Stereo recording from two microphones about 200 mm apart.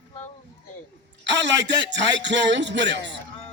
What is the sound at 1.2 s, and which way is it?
A man's voice, 60° right (ahead or behind).